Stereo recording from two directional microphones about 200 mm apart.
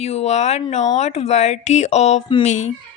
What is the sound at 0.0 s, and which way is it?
Speech, 35° left (ahead or behind).